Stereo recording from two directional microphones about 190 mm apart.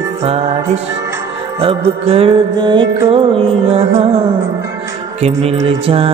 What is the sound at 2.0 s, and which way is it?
Music, 30° right (ahead or behind).